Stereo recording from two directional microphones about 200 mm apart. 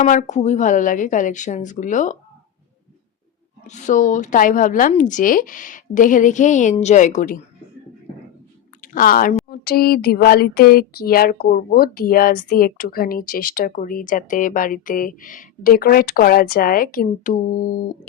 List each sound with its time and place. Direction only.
0.0 s a woman's voice: 35° left (ahead or behind)
3.7 s a woman's voice: 40° left (ahead or behind)
8.8 s a woman's voice: 45° left (ahead or behind)
9.5 s a sound: 50° left (ahead or behind)